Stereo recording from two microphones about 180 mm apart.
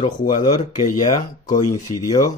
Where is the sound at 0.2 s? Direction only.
25° left (ahead or behind).